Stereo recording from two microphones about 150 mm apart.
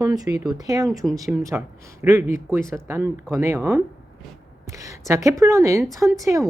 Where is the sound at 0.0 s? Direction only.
25° right (ahead or behind).